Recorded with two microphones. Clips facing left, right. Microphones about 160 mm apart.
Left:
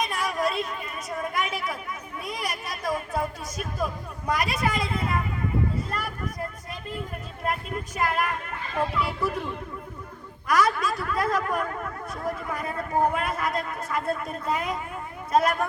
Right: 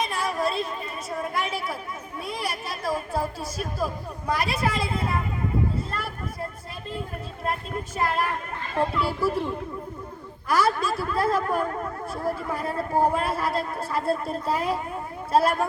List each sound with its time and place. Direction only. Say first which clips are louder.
0.0 s chatter: right 1 dB; 30° right (ahead or behind)
1.3 s a sound: even; 30° right (ahead or behind)
2.2 s speech: right 2 dB; 30° right (ahead or behind)
7.9 s speech: right 1 dB; 30° right (ahead or behind)
10.5 s speech: even; 30° right (ahead or behind)